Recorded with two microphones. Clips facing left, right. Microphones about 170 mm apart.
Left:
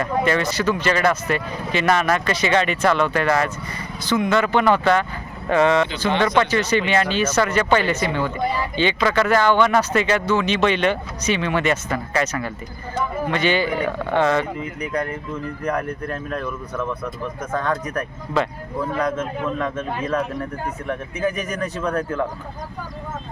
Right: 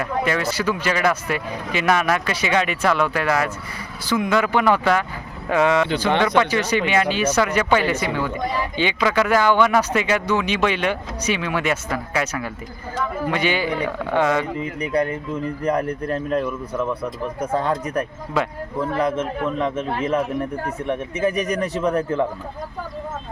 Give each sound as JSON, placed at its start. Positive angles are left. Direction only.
{"t": 0.0, "sound": "speech", "side_deg": -5}
{"t": 15.6, "sound": "speech", "side_deg": -30}
{"t": 16.4, "sound": "speech", "side_deg": -10}
{"t": 19.1, "sound": "speech", "side_deg": -20}